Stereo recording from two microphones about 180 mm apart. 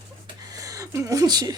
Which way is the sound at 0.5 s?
20° right (ahead or behind).